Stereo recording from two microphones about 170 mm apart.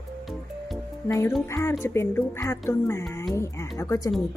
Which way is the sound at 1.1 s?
15° left (ahead or behind).